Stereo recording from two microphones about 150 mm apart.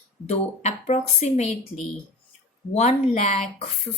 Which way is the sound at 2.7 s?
45° left (ahead or behind).